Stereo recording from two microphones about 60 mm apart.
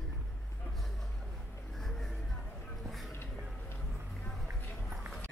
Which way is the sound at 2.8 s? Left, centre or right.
Centre.